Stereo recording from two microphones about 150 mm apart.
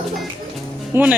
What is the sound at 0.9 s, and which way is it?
Speech, 15° right (ahead or behind).